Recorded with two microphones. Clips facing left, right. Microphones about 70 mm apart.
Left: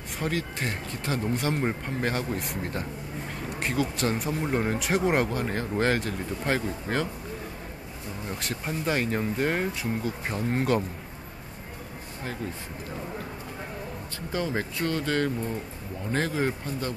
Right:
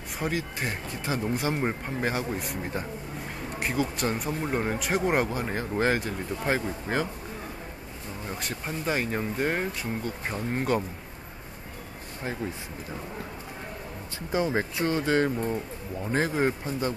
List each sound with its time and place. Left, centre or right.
0.2 s speech: centre
8.3 s speech: centre
14.3 s speech: centre